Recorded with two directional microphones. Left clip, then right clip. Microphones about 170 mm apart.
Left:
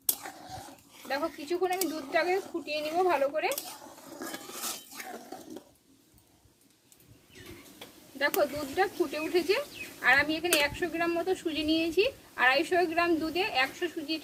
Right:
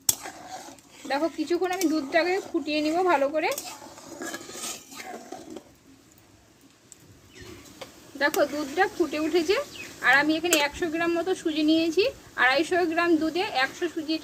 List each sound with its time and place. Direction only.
0.2 s whispering: 10° left (ahead or behind)
1.0 s speech: 25° right (ahead or behind)
4.5 s filing: centre (ahead or behind)
8.4 s speech: 15° right (ahead or behind)